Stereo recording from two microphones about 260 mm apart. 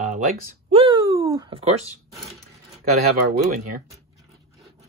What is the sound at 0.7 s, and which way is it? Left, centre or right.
Speech, centre.